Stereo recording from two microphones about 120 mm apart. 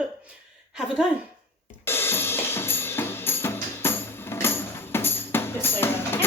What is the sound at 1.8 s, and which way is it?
Drum kit, 20° left (ahead or behind).